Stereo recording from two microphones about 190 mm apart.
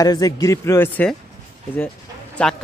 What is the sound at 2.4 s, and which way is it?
Speech, 5° left (ahead or behind).